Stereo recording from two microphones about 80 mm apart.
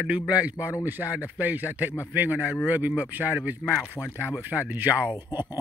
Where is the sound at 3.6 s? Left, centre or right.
Centre.